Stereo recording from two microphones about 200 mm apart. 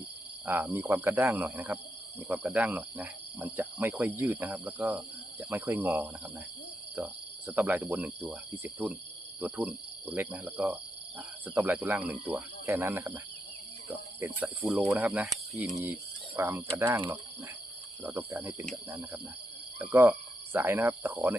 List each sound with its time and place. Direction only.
0.4 s speech: 10° right (ahead or behind)